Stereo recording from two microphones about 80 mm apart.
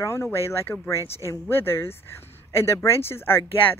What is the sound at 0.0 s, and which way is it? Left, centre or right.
Speech, left.